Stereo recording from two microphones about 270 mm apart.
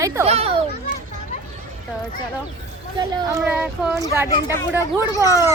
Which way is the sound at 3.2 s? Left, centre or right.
Centre.